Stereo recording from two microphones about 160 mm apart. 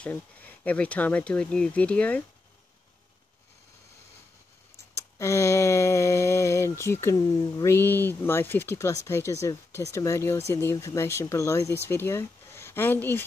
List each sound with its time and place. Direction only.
0.0 s speech: 10° left (ahead or behind)
4.9 s speech: 20° left (ahead or behind)